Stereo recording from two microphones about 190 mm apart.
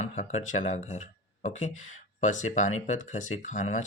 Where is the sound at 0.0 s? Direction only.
40° left (ahead or behind).